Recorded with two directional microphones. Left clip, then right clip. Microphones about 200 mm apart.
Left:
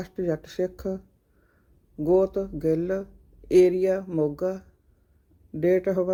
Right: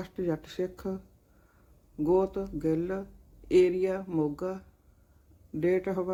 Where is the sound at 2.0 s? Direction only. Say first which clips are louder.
Left 5 dB; 10° left (ahead or behind).